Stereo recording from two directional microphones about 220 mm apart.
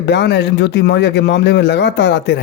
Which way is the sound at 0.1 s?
50° left (ahead or behind).